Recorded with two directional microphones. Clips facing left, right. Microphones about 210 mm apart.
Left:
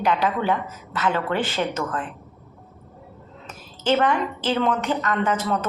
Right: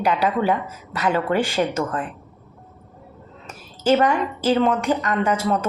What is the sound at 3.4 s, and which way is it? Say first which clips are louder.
A woman's voice: right 4 dB; 10° right (ahead or behind).